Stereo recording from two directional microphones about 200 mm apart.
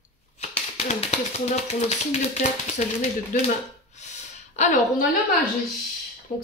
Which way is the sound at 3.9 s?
35° left (ahead or behind).